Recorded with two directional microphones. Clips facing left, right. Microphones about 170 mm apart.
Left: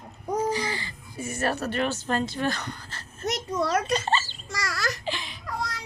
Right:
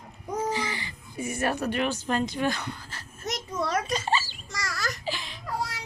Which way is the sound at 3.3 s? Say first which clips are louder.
Left 4 dB; 70° left (ahead or behind).